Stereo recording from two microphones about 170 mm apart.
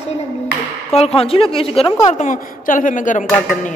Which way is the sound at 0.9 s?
35° left (ahead or behind).